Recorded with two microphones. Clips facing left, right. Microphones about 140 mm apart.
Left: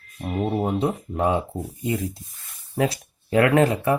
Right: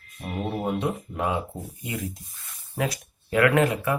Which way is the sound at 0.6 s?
30° left (ahead or behind).